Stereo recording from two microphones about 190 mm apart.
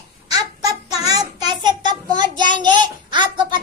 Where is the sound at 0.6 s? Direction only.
20° right (ahead or behind).